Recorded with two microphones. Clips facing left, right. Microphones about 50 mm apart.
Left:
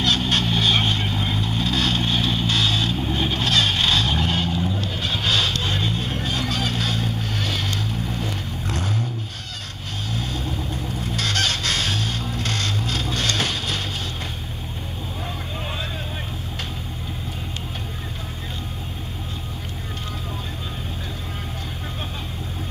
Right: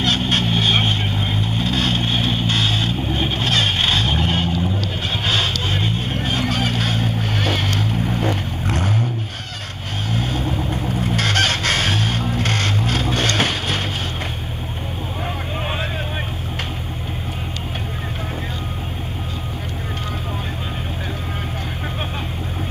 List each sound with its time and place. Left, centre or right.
0.0 s vehicle: centre
5.1 s music: centre; by 8.3 s right
8.6 s boat: right
10.1 s honk: right
11.3 s music: right
12.0 s music: right
13.4 s boat: right